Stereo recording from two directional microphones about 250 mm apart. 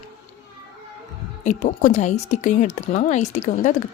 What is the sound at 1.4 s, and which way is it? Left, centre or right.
A woman's voice, left.